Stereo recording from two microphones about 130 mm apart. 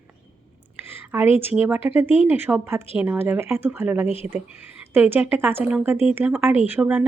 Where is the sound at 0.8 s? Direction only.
15° right (ahead or behind).